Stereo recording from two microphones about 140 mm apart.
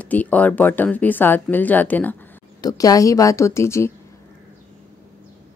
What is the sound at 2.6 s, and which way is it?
A woman's voice, 25° left (ahead or behind).